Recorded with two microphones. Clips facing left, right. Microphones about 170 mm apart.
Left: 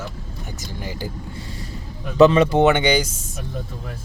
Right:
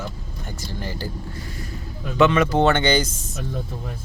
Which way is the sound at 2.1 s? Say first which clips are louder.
Left 4 dB; 35° left (ahead or behind).